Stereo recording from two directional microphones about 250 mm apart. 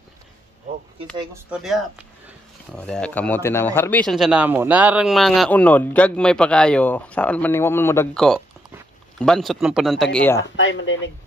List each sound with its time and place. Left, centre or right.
1.1 s speech: centre
10.5 s speech: left